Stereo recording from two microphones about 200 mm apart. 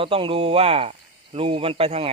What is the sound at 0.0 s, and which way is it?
Speech, 25° right (ahead or behind).